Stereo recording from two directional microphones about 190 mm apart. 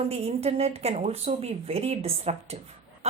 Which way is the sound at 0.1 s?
35° right (ahead or behind).